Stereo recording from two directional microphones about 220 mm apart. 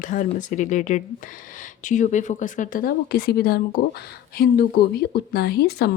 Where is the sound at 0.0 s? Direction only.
35° left (ahead or behind).